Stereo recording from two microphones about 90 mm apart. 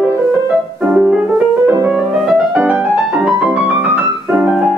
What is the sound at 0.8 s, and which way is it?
Music, 15° right (ahead or behind).